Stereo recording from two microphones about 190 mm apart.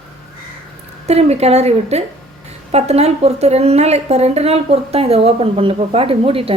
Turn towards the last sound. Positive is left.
turn(degrees=-30)  # may be behind; listen again after turning